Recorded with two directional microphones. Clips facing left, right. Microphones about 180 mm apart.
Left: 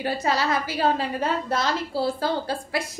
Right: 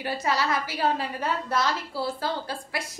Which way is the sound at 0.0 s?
30° left (ahead or behind).